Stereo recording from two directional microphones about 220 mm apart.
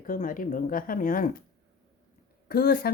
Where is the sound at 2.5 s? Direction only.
45° left (ahead or behind).